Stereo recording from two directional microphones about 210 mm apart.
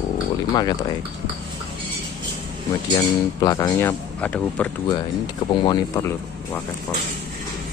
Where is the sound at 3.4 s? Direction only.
15° left (ahead or behind).